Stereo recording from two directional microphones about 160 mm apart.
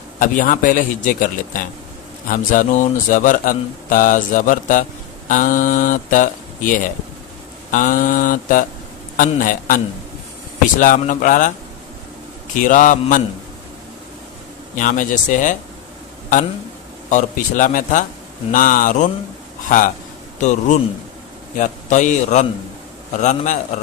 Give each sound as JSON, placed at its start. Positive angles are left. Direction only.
{"t": 0.2, "sound": "speech", "side_deg": 55}
{"t": 12.5, "sound": "speech", "side_deg": 55}
{"t": 14.8, "sound": "a man's voice", "side_deg": 55}
{"t": 17.1, "sound": "a man's voice", "side_deg": 55}
{"t": 20.4, "sound": "a man's voice", "side_deg": 50}